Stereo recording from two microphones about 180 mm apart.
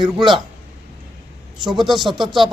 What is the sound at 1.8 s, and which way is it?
Speech, centre (ahead or behind).